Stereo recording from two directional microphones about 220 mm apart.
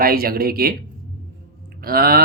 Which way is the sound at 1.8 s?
45° right (ahead or behind).